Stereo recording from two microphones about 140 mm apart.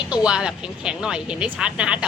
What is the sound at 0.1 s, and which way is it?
A woman's voice, 5° right (ahead or behind).